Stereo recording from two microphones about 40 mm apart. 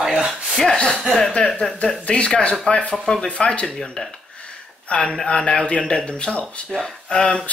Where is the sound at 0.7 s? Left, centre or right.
Centre.